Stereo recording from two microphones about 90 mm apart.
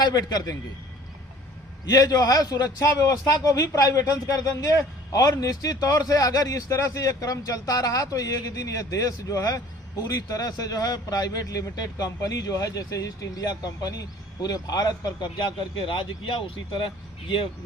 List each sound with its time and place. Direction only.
0.0 s a man's voice: 50° left (ahead or behind)
1.9 s a man's voice: 45° left (ahead or behind); by 16.9 s 65° left (ahead or behind)